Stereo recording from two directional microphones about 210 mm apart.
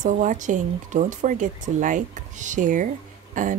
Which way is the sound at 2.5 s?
40° right (ahead or behind).